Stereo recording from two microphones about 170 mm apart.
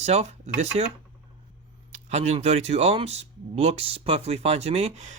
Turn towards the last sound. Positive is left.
turn(degrees=-40)  # may be behind; listen again after turning